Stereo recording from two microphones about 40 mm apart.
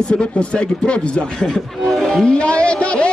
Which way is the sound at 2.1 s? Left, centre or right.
Centre.